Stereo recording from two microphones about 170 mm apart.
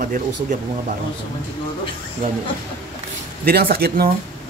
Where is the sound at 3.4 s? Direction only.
65° right (ahead or behind).